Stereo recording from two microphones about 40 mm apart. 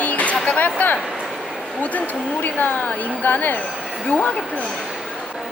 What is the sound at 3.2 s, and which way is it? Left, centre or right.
Speech, left.